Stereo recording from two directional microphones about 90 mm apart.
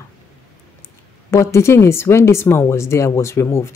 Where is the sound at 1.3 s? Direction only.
30° left (ahead or behind).